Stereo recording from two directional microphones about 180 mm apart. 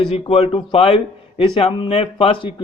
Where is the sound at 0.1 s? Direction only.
35° left (ahead or behind).